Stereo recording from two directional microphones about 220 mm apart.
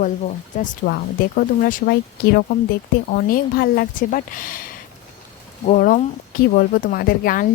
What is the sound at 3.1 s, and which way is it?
Speech, 45° left (ahead or behind).